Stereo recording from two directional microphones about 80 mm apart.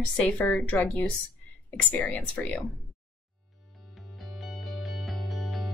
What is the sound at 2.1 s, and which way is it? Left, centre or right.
Speech, centre.